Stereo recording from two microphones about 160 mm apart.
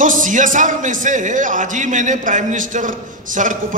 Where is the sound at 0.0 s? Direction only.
55° right (ahead or behind).